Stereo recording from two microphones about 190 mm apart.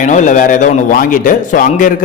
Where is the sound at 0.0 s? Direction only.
40° left (ahead or behind).